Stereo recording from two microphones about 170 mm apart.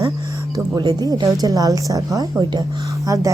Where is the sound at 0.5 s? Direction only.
25° right (ahead or behind).